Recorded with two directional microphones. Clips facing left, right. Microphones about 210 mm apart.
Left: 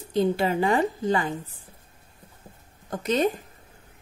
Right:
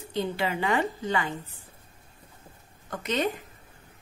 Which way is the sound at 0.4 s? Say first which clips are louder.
Left 4 dB; 35° left (ahead or behind).